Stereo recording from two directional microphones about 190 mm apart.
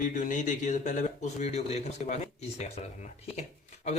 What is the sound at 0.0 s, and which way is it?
Speech, 45° left (ahead or behind).